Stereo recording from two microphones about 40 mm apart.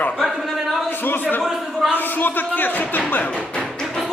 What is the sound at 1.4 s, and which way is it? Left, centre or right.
Speech, centre.